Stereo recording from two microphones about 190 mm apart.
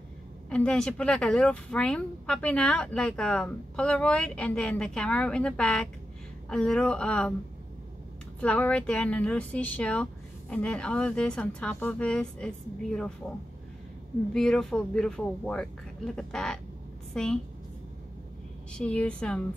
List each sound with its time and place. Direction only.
0.5 s speech: 5° left (ahead or behind)
8.4 s speech: 5° left (ahead or behind)
14.3 s a woman's voice: 5° left (ahead or behind)
18.7 s speech: 5° left (ahead or behind)